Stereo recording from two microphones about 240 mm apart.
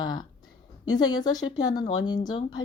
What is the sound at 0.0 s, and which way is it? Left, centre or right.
Speech, centre.